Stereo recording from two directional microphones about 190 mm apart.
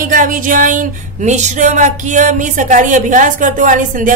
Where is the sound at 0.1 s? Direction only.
45° right (ahead or behind).